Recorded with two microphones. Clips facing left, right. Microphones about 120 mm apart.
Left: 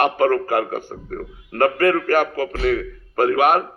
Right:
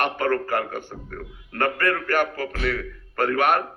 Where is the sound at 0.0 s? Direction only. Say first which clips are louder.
Left 6 dB; 40° left (ahead or behind).